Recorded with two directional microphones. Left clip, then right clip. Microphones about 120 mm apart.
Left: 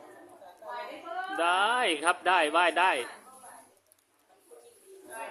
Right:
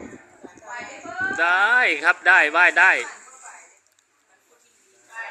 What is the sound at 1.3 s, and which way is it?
Speech, 20° left (ahead or behind).